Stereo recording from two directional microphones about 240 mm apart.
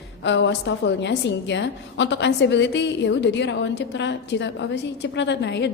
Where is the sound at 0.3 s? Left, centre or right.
Left.